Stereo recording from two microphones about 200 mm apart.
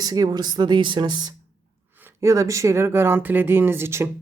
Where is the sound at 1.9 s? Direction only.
10° right (ahead or behind).